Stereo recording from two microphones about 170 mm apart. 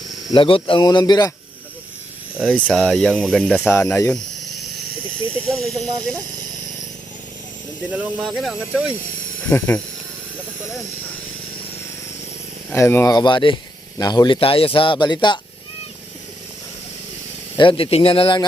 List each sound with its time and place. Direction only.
0.3 s speech: 30° left (ahead or behind)
2.5 s speech: 5° left (ahead or behind)
3.7 s speech: 15° left (ahead or behind)
5.4 s speech: 5° left (ahead or behind)
7.9 s speech: 5° right (ahead or behind)
9.5 s speech: 10° left (ahead or behind)
12.7 s speech: 15° left (ahead or behind)
13.1 s speech: 25° left (ahead or behind)
17.6 s speech: 30° left (ahead or behind)